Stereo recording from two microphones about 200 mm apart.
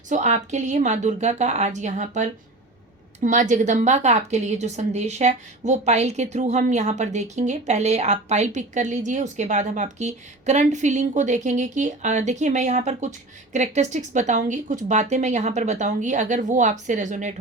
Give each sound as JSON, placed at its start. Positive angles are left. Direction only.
{"t": 0.1, "sound": "a woman's voice", "side_deg": -35}